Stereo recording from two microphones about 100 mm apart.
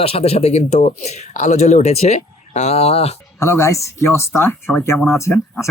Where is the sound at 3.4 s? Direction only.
30° left (ahead or behind).